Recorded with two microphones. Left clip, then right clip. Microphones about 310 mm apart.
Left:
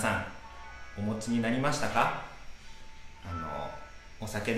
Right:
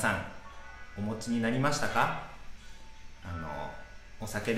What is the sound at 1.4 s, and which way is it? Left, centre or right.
Speech, right.